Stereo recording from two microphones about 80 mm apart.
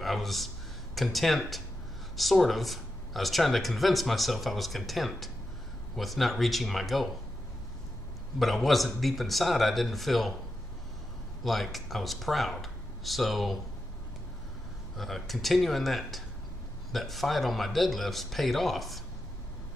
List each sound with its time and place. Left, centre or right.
0.0 s a man's voice: centre
8.4 s speech: centre
11.4 s speech: centre
15.0 s speech: centre